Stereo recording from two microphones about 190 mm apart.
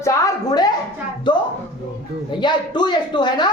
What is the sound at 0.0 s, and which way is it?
Music, 15° left (ahead or behind).